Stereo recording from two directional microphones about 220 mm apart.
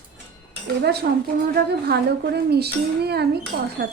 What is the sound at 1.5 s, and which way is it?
Speech, 50° right (ahead or behind).